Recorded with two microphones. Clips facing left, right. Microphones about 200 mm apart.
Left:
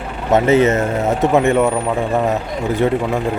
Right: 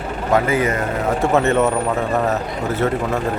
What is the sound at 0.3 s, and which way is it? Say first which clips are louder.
Speech: left 5 dB; 25° left (ahead or behind).